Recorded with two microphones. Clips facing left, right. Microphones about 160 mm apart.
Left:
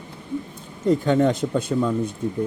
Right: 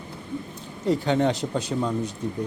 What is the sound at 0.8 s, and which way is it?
Speech, 45° left (ahead or behind).